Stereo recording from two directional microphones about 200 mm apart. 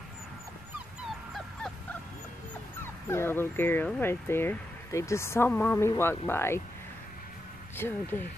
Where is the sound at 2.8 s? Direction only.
10° left (ahead or behind).